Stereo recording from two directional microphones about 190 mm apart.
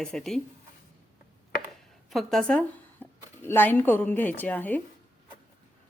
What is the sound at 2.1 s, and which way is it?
Speech, centre (ahead or behind).